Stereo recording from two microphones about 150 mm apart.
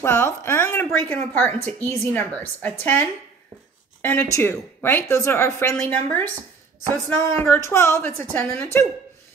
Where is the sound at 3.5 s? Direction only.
20° right (ahead or behind).